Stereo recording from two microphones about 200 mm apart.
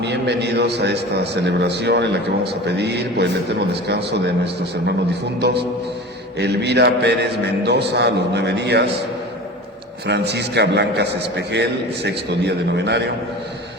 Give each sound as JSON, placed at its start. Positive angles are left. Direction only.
{"t": 0.0, "sound": "a man's voice", "side_deg": -60}
{"t": 5.4, "sound": "a man's voice", "side_deg": -55}
{"t": 10.1, "sound": "a man's voice", "side_deg": -55}